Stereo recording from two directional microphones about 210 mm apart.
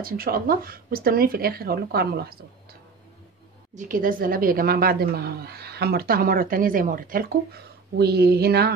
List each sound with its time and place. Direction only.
0.0 s a woman's voice: 45° right (ahead or behind)
3.7 s a woman's voice: 40° right (ahead or behind)